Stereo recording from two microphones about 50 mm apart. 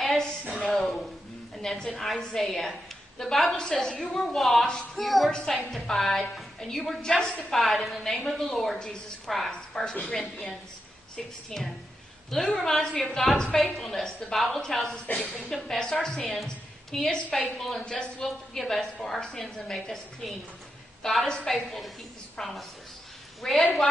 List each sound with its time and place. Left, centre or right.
0.0 s a sound: centre
2.0 s a woman's voice: centre
5.3 s a woman's voice: centre
15.0 s speech: left
15.5 s a woman's voice: centre